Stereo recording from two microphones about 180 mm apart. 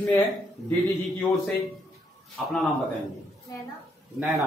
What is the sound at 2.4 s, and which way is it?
Speech, centre (ahead or behind).